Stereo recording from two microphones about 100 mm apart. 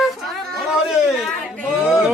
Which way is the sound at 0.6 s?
5° right (ahead or behind).